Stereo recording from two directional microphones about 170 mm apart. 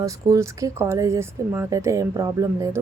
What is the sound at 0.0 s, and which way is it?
A woman's voice, 20° right (ahead or behind).